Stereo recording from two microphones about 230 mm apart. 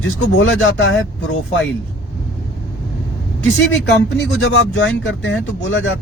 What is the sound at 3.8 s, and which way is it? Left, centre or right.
Speech, left.